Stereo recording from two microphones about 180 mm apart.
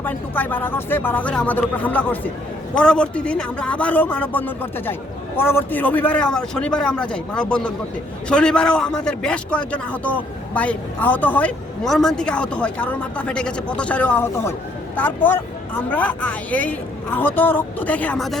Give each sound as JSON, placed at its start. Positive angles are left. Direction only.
{"t": 0.0, "sound": "a man's voice", "side_deg": 10}